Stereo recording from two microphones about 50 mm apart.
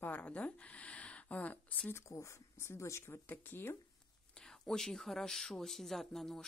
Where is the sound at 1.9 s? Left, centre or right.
Left.